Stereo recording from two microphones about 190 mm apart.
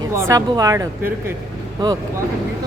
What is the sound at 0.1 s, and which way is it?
A woman's voice, 15° right (ahead or behind).